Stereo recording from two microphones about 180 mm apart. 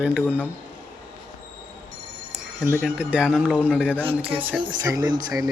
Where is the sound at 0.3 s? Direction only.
10° right (ahead or behind).